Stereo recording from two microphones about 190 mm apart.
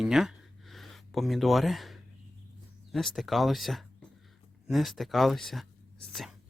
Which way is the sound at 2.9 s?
Centre (ahead or behind).